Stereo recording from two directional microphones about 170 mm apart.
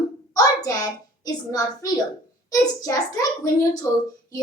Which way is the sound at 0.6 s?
20° left (ahead or behind).